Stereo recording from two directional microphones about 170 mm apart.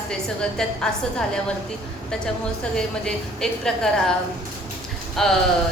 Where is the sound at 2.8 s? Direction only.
5° left (ahead or behind).